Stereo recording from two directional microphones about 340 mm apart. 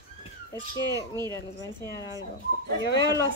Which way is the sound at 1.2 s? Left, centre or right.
Centre.